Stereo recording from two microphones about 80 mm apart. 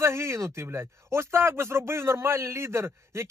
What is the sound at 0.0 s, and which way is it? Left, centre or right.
Speech, right.